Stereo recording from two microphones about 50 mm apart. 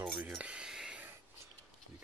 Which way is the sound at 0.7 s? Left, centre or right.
Centre.